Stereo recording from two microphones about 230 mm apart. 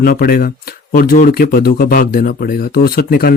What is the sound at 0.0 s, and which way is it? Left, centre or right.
Speech, left.